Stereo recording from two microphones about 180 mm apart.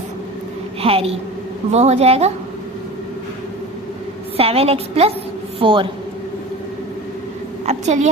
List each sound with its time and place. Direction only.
0.8 s a woman's voice: 30° right (ahead or behind)
4.4 s a woman's voice: 35° right (ahead or behind)
7.6 s a woman's voice: 40° right (ahead or behind)